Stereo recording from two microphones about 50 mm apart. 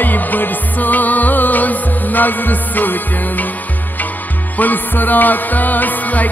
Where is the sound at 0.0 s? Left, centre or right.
Left.